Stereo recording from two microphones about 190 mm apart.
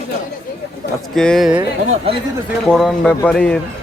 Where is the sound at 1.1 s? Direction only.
5° left (ahead or behind).